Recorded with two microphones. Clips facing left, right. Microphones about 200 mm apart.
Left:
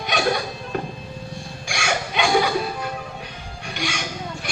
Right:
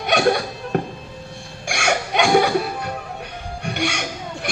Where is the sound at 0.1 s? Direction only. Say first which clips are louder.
Right 5 dB; 50° right (ahead or behind).